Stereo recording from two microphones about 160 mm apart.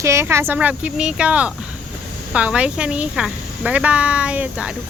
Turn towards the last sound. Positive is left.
turn(degrees=-10)  # may be behind; listen again after turning